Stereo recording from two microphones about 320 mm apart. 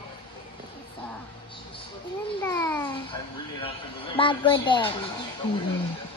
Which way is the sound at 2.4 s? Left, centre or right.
Centre.